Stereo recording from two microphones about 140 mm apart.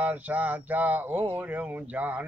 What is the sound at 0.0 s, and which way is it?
Speech, 10° right (ahead or behind).